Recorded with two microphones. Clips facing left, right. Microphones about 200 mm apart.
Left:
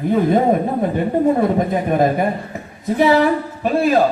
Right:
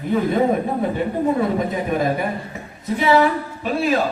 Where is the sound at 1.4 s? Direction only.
50° left (ahead or behind).